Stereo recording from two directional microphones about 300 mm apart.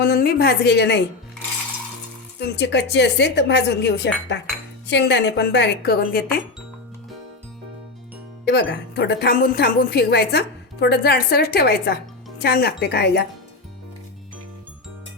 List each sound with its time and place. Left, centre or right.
0.0 s a woman's voice: left
2.4 s a woman's voice: left
8.4 s a woman's voice: left